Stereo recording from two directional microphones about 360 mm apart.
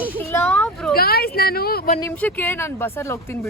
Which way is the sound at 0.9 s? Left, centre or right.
Left.